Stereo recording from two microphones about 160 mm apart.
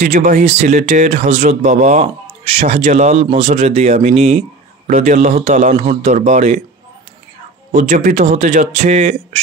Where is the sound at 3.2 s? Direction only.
35° right (ahead or behind).